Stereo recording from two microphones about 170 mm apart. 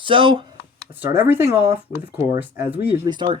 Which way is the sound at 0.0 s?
30° right (ahead or behind).